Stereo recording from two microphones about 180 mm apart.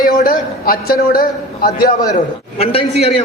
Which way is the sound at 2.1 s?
35° left (ahead or behind).